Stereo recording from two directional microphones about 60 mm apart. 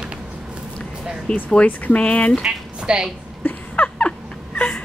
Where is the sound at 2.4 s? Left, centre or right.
Centre.